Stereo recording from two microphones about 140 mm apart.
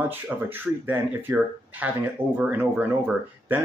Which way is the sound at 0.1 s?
15° right (ahead or behind).